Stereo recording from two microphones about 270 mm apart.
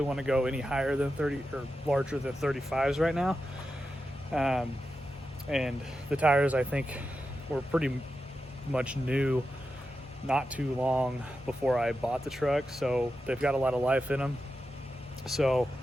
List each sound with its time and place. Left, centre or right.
0.0 s speech: centre
15.3 s speech: centre